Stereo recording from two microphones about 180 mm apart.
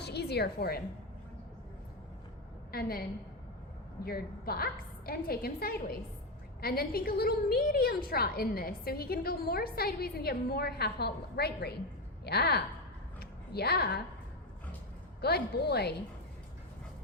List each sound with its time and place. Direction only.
0.0 s music: 65° left (ahead or behind)
2.7 s a woman's voice: 55° left (ahead or behind)
4.0 s a woman's voice: 60° left (ahead or behind)
13.1 s a sound: 65° left (ahead or behind)
15.2 s a woman's voice: 60° left (ahead or behind)